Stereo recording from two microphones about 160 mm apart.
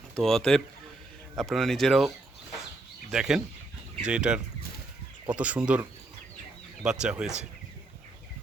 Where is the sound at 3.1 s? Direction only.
5° right (ahead or behind).